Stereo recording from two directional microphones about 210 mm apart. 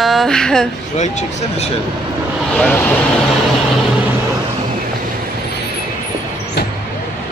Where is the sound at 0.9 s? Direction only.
35° left (ahead or behind).